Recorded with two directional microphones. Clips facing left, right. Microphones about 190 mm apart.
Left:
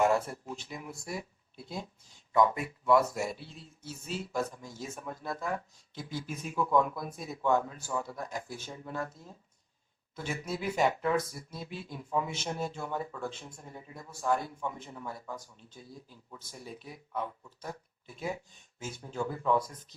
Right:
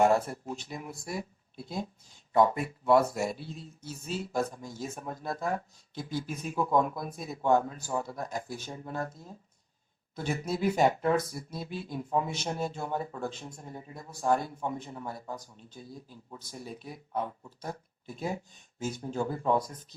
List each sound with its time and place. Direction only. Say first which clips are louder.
0.0 s speech: right 3 dB; 40° right (ahead or behind)
10.2 s speech: right 5 dB; 40° right (ahead or behind)